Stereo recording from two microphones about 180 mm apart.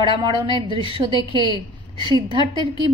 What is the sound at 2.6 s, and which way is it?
Speech, 25° right (ahead or behind).